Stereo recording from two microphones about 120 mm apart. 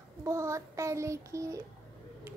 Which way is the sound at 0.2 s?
25° right (ahead or behind).